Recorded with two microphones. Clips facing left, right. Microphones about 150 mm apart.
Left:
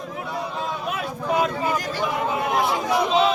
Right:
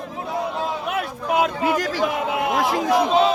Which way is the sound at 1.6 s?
90° right.